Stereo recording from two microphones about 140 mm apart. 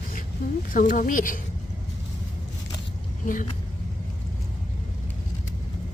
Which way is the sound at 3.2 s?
70° left (ahead or behind).